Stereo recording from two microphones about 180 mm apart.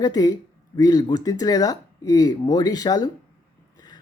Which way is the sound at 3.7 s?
20° left (ahead or behind).